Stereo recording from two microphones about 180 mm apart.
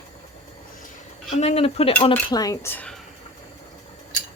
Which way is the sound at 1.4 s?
35° left (ahead or behind).